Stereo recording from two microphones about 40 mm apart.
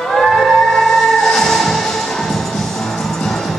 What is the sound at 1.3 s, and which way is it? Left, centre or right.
Music, centre.